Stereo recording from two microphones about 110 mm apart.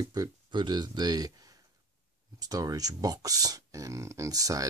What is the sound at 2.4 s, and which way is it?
Speech, 35° right (ahead or behind).